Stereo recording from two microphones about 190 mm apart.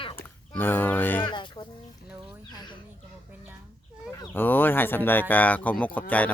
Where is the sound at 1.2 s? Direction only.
25° left (ahead or behind).